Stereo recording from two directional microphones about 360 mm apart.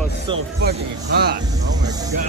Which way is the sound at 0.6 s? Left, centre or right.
Right.